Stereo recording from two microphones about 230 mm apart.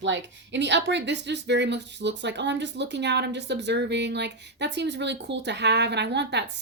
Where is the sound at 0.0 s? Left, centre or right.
Right.